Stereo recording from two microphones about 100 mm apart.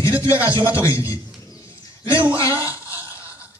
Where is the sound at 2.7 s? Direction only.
30° left (ahead or behind).